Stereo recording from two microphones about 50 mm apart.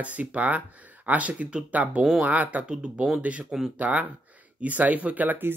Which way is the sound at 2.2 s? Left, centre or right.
Right.